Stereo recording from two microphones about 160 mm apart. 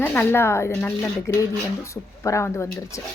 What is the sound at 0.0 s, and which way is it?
A woman's voice, 10° left (ahead or behind).